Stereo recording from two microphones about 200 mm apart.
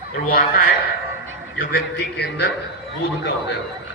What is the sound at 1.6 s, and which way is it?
Speech, 60° left (ahead or behind).